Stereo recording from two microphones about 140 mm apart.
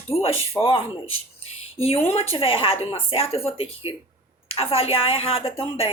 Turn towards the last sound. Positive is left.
turn(degrees=40)  # may be behind; listen again after turning